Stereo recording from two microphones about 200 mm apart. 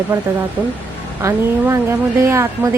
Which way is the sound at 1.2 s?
15° right (ahead or behind).